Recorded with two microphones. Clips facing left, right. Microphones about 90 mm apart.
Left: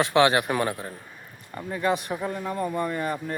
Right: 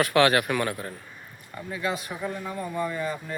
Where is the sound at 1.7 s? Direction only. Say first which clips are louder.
Left 5 dB; 50° left (ahead or behind).